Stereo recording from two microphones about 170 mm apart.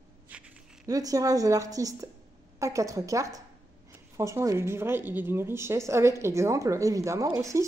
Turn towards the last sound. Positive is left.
turn(degrees=-20)  # may be behind; listen again after turning